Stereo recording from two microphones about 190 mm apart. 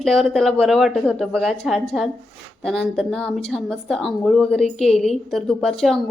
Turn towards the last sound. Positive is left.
turn(degrees=0)  # may be behind; listen again after turning